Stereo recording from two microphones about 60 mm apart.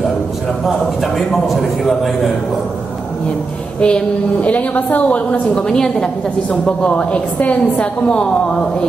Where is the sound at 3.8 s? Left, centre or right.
Centre.